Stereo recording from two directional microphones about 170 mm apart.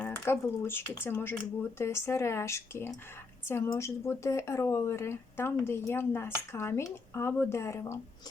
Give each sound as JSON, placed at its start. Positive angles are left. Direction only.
{"t": 0.0, "sound": "speech", "side_deg": 15}